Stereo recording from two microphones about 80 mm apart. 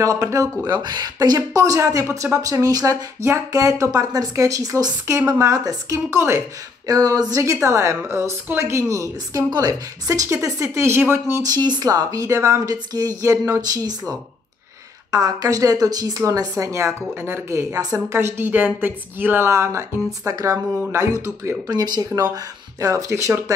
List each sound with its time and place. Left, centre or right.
0.0 s speech: right
0.7 s speech: right
1.6 s speech: right
3.2 s speech: right
6.0 s speech: right
6.9 s speech: right
9.5 s speech: right
11.4 s speech: right
16.2 s speech: right
18.5 s speech: right
19.5 s speech: right
20.2 s speech: right
21.6 s speech: right